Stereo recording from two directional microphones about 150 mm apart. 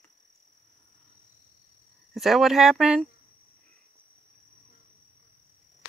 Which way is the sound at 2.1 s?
Centre (ahead or behind).